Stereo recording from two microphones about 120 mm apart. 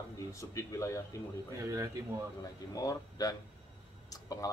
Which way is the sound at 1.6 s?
25° right (ahead or behind).